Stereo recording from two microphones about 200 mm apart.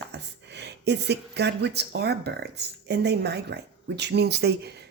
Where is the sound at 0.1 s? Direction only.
60° right (ahead or behind).